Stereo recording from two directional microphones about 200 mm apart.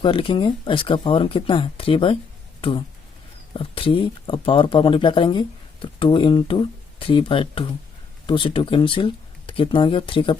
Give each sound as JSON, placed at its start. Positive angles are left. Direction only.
{"t": 0.0, "sound": "speech", "side_deg": 25}